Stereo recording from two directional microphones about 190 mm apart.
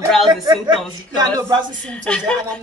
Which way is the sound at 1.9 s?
5° left (ahead or behind).